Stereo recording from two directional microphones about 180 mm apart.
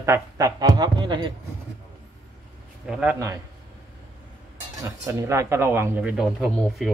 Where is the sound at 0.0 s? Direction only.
15° right (ahead or behind).